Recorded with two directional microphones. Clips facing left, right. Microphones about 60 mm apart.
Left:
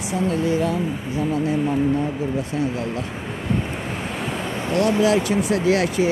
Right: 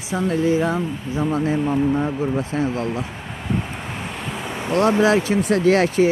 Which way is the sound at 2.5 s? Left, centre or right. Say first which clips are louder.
Right 2 dB; right.